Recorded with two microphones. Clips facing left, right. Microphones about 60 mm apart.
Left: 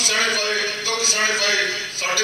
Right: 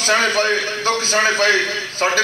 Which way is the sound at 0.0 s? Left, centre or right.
Right.